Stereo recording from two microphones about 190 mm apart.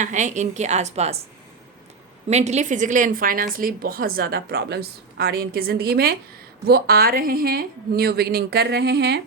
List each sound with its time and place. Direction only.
0.0 s a woman's voice: 40° right (ahead or behind)
2.3 s a woman's voice: 35° right (ahead or behind); by 9.2 s 60° right (ahead or behind)